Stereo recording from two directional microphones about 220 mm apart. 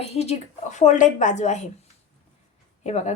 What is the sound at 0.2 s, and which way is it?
A woman's voice, 30° left (ahead or behind).